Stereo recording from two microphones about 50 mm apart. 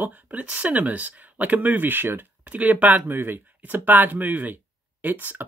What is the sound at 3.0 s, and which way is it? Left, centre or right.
Speech, right.